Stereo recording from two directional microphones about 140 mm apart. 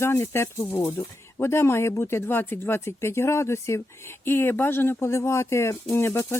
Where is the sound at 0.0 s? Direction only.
20° left (ahead or behind).